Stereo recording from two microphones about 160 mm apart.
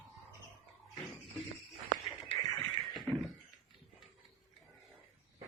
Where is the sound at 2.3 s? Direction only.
25° left (ahead or behind).